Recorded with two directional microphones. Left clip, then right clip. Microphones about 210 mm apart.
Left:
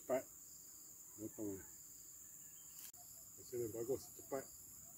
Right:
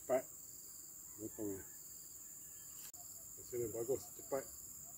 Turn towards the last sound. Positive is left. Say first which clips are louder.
# right 4 dB
turn(degrees=10)  # may be behind; listen again after turning